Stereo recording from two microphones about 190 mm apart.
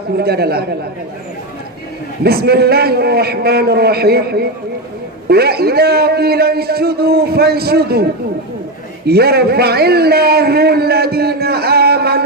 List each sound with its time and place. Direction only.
0.2 s a man's voice: 55° right (ahead or behind)
2.2 s a man's voice: 55° right (ahead or behind)
9.0 s a sound: 55° right (ahead or behind)